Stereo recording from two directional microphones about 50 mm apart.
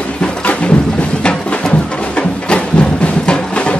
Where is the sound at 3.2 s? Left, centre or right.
Left.